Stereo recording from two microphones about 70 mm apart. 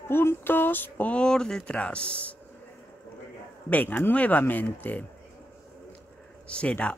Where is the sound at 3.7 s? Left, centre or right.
Left.